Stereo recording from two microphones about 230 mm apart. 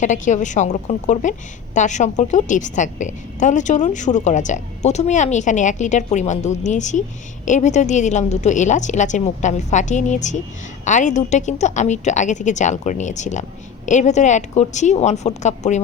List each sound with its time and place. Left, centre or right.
0.0 s a woman's voice: left